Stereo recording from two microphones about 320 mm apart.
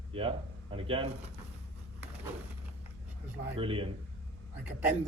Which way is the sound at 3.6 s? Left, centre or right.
Centre.